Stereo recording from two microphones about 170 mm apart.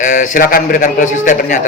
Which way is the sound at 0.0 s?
50° left (ahead or behind).